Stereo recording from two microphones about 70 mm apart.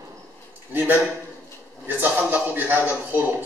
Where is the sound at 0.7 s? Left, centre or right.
Right.